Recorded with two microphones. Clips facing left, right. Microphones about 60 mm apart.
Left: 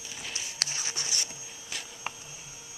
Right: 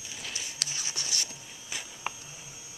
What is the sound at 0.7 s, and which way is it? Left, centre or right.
Scratch, left.